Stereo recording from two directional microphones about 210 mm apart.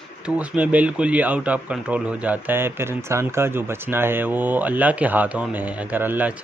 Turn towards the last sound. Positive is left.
turn(degrees=-10)  # may be behind; listen again after turning